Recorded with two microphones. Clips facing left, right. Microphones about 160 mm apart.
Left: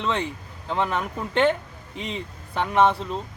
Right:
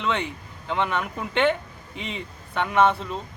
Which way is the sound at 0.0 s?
35° left (ahead or behind).